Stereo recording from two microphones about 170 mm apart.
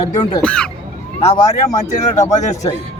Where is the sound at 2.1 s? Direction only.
45° left (ahead or behind).